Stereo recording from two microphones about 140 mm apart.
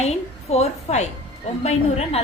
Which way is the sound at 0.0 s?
50° left (ahead or behind).